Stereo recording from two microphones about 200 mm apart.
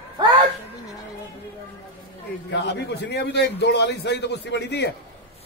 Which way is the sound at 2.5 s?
55° left (ahead or behind).